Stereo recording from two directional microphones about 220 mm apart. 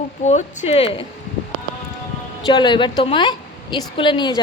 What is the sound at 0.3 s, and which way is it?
Speech, 30° left (ahead or behind).